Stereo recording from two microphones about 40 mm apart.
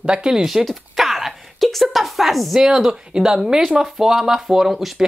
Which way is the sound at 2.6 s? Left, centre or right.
Centre.